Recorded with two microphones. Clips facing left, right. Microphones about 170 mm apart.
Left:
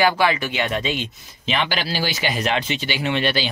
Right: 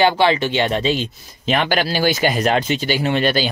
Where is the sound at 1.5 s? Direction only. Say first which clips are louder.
Right 5 dB; 50° right (ahead or behind).